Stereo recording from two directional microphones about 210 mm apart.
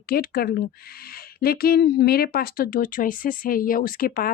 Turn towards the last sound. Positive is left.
turn(degrees=45)  # may be behind; listen again after turning